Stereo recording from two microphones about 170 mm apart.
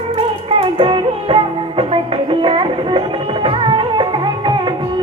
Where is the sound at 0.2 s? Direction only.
30° right (ahead or behind).